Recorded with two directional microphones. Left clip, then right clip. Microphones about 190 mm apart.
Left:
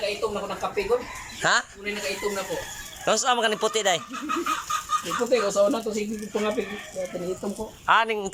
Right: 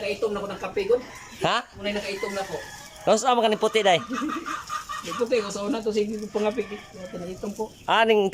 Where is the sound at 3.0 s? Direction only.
20° right (ahead or behind).